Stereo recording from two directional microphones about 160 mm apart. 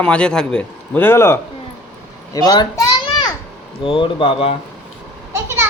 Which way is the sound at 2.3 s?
25° left (ahead or behind).